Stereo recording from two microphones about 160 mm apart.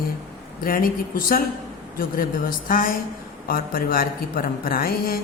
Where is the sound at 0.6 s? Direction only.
60° left (ahead or behind).